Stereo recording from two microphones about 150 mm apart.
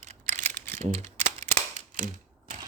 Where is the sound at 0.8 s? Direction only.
45° right (ahead or behind).